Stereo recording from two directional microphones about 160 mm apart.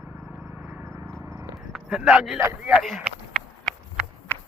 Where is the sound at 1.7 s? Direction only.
5° right (ahead or behind).